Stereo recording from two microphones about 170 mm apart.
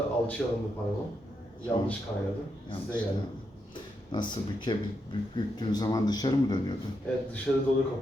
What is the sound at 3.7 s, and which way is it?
A man's voice, 25° left (ahead or behind).